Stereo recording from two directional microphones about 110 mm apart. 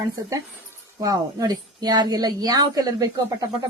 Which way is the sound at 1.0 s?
35° right (ahead or behind).